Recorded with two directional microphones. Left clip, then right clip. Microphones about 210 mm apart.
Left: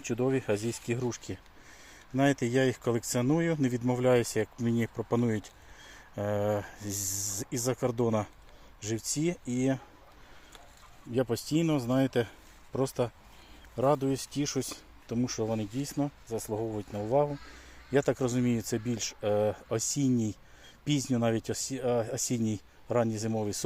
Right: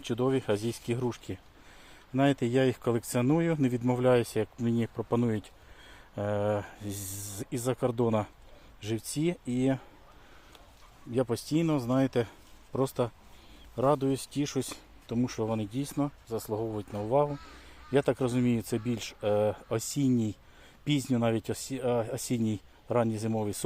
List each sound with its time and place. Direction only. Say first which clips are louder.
0.0 s speech: right 1 dB; centre (ahead or behind)
6.9 s speech: left 7 dB; 35° right (ahead or behind)
7.5 s speech: right 1 dB; centre (ahead or behind)
11.1 s speech: even; centre (ahead or behind)